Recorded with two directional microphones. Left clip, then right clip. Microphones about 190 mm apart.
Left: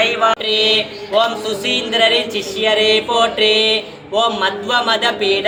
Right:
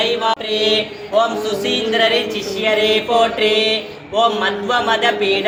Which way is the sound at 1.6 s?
40° left (ahead or behind).